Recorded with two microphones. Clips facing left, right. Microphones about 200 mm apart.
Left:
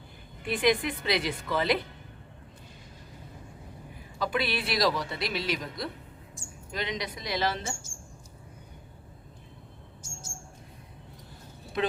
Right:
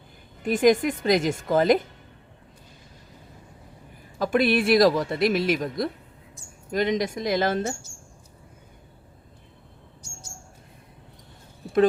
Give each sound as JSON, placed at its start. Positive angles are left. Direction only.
{"t": 0.4, "sound": "speech", "side_deg": -45}
{"t": 4.2, "sound": "speech", "side_deg": -45}
{"t": 10.0, "sound": "bird", "side_deg": 50}